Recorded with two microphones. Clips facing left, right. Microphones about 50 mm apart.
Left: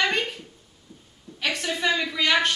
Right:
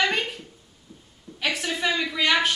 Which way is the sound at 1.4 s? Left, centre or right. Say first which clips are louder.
Even; centre.